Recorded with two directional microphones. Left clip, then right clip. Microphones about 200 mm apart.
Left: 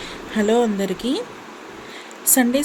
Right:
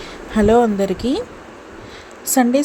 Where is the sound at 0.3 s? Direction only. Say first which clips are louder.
Right 5 dB; 20° right (ahead or behind).